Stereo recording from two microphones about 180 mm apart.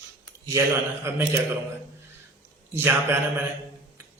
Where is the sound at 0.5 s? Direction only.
15° right (ahead or behind).